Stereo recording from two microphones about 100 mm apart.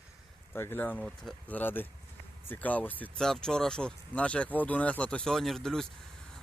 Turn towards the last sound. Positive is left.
turn(degrees=5)  # may be behind; listen again after turning